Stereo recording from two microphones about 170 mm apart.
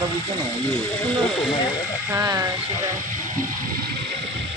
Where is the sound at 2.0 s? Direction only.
20° right (ahead or behind).